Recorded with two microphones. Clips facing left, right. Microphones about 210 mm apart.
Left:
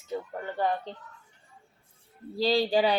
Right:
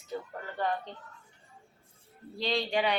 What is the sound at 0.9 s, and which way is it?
Speech, 30° left (ahead or behind).